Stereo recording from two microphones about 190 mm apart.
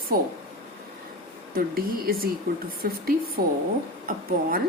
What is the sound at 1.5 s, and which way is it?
A woman's voice, 50° right (ahead or behind).